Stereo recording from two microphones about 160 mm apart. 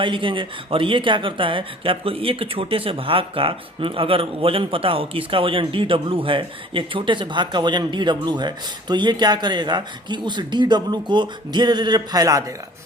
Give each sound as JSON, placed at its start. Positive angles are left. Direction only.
{"t": 0.0, "sound": "speech", "side_deg": -30}